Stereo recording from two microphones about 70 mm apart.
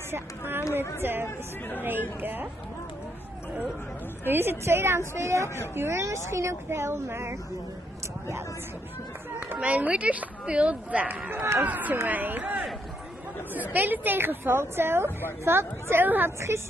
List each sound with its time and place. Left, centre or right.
0.1 s a woman's voice: right
4.3 s a woman's voice: right
9.5 s a woman's voice: right
16.3 s a woman's voice: right